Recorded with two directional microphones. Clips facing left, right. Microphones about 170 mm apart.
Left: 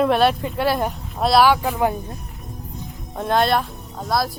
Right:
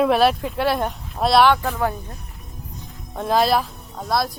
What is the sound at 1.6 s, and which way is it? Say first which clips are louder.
Speech: left 2 dB; 15° left (ahead or behind).